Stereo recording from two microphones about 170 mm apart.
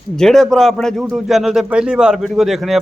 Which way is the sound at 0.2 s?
Centre (ahead or behind).